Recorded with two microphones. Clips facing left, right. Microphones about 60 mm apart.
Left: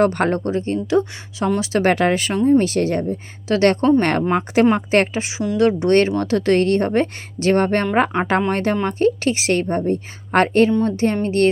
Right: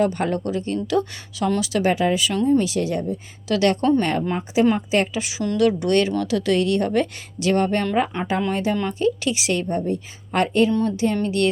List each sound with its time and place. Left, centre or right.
0.0 s a woman's voice: left
1.8 s speech: left
2.3 s speech: left
2.6 s a woman's voice: left
4.0 s a woman's voice: left
5.5 s speech: left
8.1 s speech: left
8.4 s a woman's voice: left
8.7 s a woman's voice: left